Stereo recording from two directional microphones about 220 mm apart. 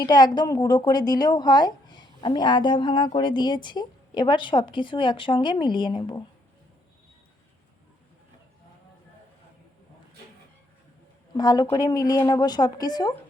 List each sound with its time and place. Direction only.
0.0 s speech: 20° left (ahead or behind)
11.3 s a woman's voice: 20° left (ahead or behind)